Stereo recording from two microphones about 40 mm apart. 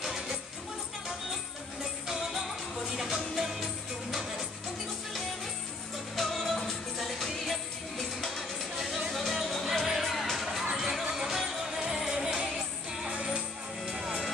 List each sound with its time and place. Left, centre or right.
0.0 s music: centre
2.0 s music: centre
6.1 s music: centre
12.3 s music: right
13.8 s music: centre